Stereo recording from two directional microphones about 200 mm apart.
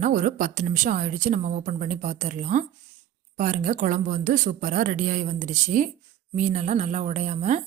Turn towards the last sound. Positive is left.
turn(degrees=-35)  # may be behind; listen again after turning